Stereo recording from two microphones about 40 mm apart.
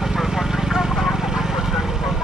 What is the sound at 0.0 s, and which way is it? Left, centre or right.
Vehicle, centre.